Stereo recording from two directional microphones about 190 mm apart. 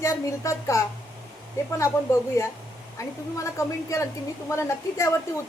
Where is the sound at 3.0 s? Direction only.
15° left (ahead or behind).